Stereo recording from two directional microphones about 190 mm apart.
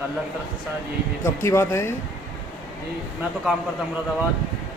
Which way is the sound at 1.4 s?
15° left (ahead or behind).